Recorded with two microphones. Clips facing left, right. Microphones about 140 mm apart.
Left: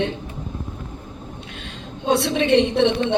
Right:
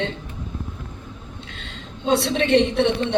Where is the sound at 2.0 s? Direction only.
15° left (ahead or behind).